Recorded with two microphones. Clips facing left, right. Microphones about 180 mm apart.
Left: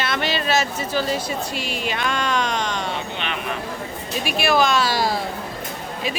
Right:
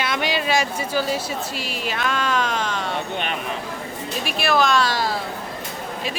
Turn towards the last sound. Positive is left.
turn(degrees=0)  # may be behind; listen again after turning